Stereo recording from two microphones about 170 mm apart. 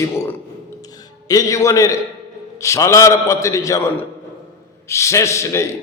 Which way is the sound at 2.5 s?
15° left (ahead or behind).